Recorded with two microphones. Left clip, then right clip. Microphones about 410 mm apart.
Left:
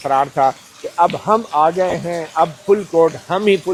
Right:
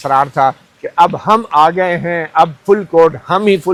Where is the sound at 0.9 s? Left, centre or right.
Right.